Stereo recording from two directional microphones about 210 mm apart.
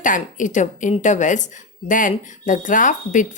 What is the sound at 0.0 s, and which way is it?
Speech, 40° left (ahead or behind).